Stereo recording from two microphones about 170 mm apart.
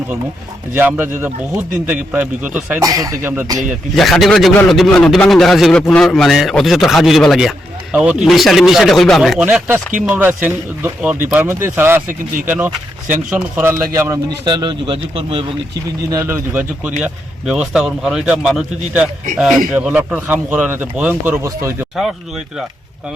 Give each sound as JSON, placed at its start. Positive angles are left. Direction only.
{"t": 0.7, "sound": "speech", "side_deg": -10}
{"t": 2.8, "sound": "speech", "side_deg": -20}
{"t": 3.9, "sound": "speech", "side_deg": 0}
{"t": 16.0, "sound": "speech", "side_deg": -15}